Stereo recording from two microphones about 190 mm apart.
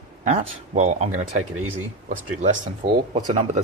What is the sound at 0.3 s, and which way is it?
Speech, 35° right (ahead or behind).